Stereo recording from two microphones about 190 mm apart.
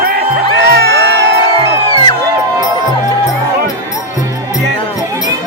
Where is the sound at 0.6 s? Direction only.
60° right (ahead or behind).